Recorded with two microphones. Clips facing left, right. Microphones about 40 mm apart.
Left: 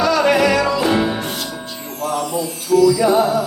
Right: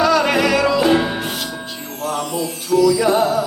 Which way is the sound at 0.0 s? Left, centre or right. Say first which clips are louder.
Left 1 dB; centre.